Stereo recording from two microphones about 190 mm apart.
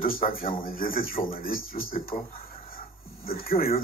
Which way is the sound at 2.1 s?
50° left (ahead or behind).